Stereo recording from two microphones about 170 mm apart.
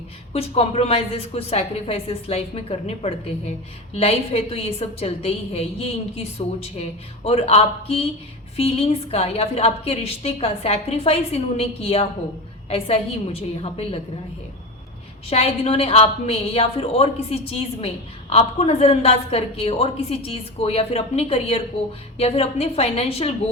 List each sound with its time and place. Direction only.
0.3 s a woman's voice: 35° left (ahead or behind)
15.3 s a woman's voice: 35° left (ahead or behind)